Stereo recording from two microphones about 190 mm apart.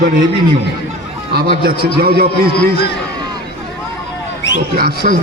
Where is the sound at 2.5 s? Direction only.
55° left (ahead or behind).